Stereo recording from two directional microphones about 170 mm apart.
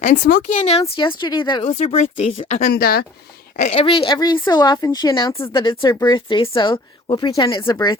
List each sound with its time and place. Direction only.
0.0 s speech: 50° left (ahead or behind); by 1.6 s 25° left (ahead or behind)
1.6 s speech: 40° left (ahead or behind)
2.5 s speech: 60° left (ahead or behind)
3.6 s speech: 35° left (ahead or behind)